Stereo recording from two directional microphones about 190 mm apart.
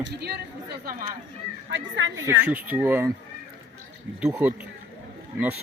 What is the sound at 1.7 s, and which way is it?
Speech, 75° right (ahead or behind).